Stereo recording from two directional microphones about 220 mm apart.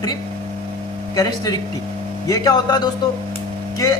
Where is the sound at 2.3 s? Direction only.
15° left (ahead or behind).